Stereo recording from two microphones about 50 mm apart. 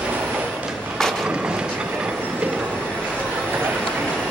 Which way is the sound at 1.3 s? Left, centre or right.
Centre.